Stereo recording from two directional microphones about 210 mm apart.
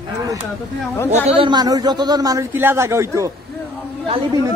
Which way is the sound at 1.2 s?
25° right (ahead or behind).